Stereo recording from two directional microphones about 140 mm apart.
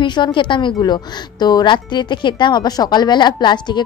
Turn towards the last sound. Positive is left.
turn(degrees=35)  # may be behind; listen again after turning